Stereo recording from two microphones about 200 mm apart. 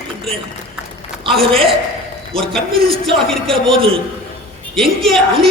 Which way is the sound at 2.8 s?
30° right (ahead or behind).